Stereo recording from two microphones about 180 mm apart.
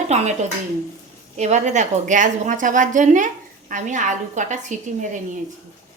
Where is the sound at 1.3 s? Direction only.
40° right (ahead or behind).